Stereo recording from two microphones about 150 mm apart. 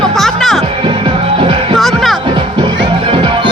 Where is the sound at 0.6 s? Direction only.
35° right (ahead or behind).